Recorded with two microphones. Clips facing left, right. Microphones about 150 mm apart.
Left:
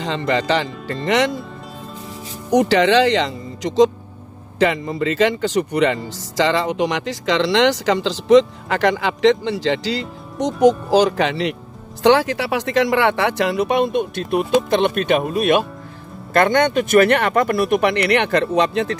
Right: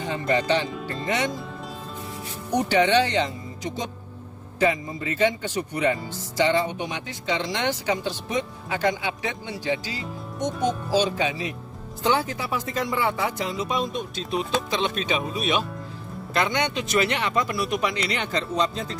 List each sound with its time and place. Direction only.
0.0 s speech: 90° left
2.5 s speech: 85° left; by 18.9 s 70° left (ahead or behind)